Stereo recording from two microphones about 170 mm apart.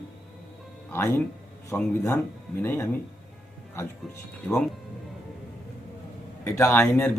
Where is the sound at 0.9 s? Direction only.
15° left (ahead or behind).